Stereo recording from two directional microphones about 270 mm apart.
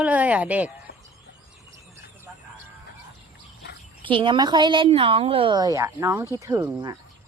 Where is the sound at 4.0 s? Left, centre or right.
Centre.